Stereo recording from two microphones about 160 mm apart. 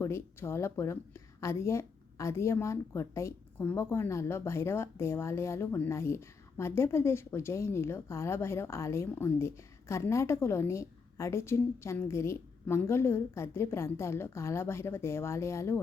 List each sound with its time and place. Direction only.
0.0 s a woman's voice: 15° left (ahead or behind)